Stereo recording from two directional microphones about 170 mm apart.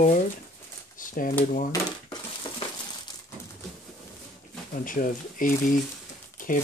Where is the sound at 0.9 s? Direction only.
55° left (ahead or behind).